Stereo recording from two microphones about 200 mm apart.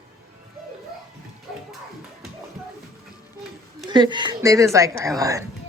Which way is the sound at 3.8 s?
20° right (ahead or behind).